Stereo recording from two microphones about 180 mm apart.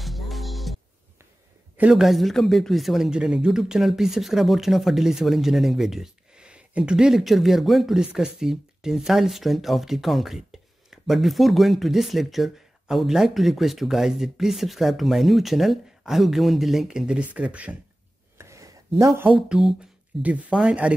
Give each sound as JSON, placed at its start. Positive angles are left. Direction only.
{"t": 0.0, "sound": "music", "side_deg": 0}
{"t": 1.8, "sound": "speech", "side_deg": -5}
{"t": 18.4, "sound": "a sound", "side_deg": -15}
{"t": 18.9, "sound": "speech", "side_deg": -15}